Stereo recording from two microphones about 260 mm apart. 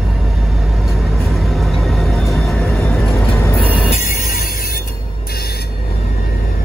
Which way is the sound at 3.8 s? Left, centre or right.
Left.